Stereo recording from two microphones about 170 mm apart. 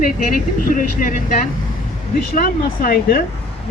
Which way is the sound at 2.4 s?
60° left (ahead or behind).